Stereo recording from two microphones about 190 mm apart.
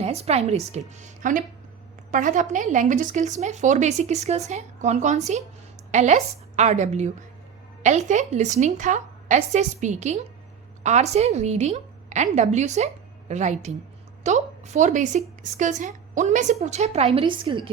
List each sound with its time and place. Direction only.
0.0 s a woman's voice: 35° right (ahead or behind)